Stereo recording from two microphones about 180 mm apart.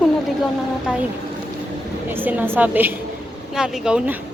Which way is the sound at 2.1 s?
10° right (ahead or behind).